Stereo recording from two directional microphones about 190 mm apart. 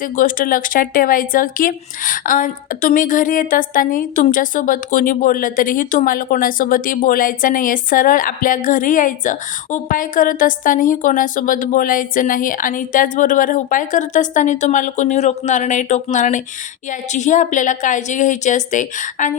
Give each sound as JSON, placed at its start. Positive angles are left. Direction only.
{"t": 0.0, "sound": "a woman's voice", "side_deg": 45}